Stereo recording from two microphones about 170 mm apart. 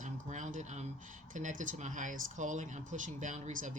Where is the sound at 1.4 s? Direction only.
50° right (ahead or behind).